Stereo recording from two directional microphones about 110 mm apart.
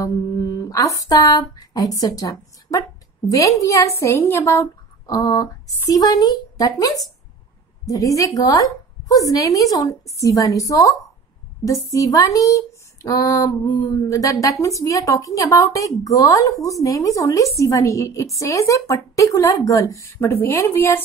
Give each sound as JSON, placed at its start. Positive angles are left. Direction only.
{"t": 0.0, "sound": "humming", "side_deg": 30}
{"t": 3.3, "sound": "speech", "side_deg": 30}